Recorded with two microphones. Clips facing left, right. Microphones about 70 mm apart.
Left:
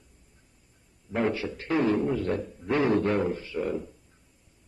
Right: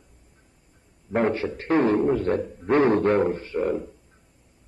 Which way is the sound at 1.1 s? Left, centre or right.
Right.